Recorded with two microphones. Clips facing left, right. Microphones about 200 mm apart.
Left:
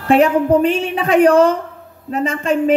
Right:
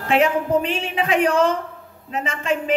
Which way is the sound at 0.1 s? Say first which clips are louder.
Left 6 dB; 40° left (ahead or behind).